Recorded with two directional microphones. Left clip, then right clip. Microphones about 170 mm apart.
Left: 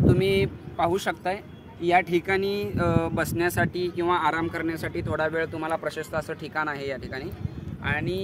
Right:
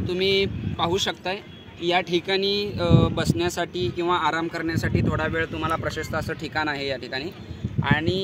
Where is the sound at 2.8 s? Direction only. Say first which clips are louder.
Even; centre (ahead or behind); by 4.6 s 20° right (ahead or behind).